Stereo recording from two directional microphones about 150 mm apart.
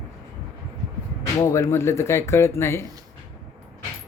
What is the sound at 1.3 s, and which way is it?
Speech, 20° left (ahead or behind).